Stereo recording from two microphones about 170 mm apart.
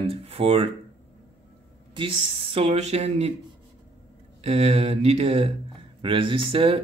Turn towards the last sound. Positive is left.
turn(degrees=-35)  # may be behind; listen again after turning